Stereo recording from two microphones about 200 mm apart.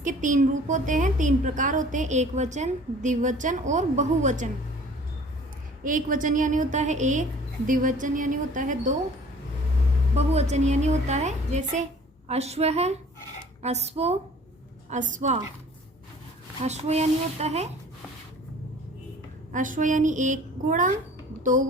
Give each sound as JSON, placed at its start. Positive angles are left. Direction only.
{"t": 0.0, "sound": "a woman's voice", "side_deg": -40}
{"t": 5.8, "sound": "a woman's voice", "side_deg": -40}
{"t": 10.2, "sound": "a woman's voice", "side_deg": -35}
{"t": 16.6, "sound": "a woman's voice", "side_deg": -35}
{"t": 19.5, "sound": "a woman's voice", "side_deg": -40}